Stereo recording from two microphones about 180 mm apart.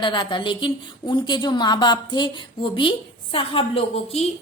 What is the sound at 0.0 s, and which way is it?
A woman's voice, 25° left (ahead or behind).